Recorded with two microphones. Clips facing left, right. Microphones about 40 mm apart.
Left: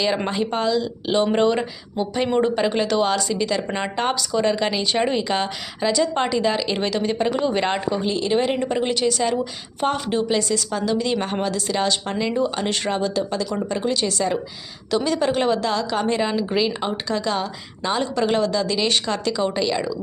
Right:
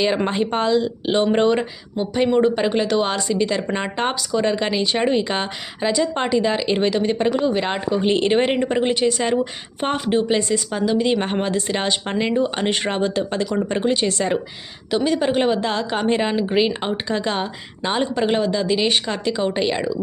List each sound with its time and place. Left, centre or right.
0.3 s a woman's voice: right; by 3.0 s centre
3.0 s speech: centre
7.3 s speech: centre
8.0 s speech: right
8.5 s a woman's voice: centre; by 14.3 s right
14.8 s a woman's voice: centre